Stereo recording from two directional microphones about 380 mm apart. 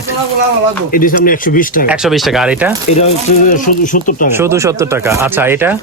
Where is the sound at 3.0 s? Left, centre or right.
Centre.